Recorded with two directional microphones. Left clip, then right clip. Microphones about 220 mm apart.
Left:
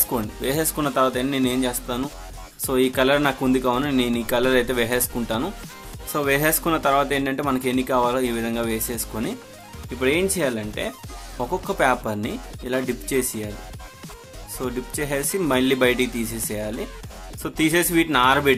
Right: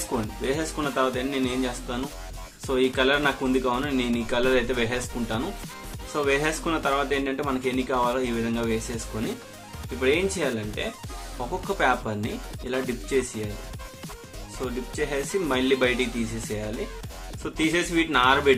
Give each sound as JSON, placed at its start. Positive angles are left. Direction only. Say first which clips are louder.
{"t": 0.4, "sound": "speech", "louder": "left 5 dB", "side_deg": 50}
{"t": 14.9, "sound": "speech", "louder": "left 1 dB", "side_deg": 50}